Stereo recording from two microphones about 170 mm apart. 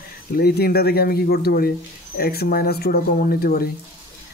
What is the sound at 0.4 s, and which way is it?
Speech, 65° left (ahead or behind).